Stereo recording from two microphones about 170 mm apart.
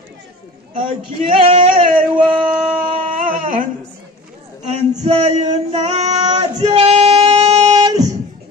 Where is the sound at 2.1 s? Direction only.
30° right (ahead or behind).